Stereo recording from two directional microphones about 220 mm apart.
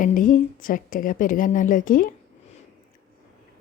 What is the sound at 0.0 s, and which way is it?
A woman's voice, 35° left (ahead or behind).